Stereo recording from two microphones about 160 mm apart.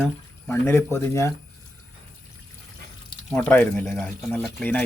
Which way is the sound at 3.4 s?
10° left (ahead or behind).